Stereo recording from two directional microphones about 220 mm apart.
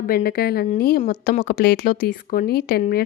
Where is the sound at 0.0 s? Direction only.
45° left (ahead or behind).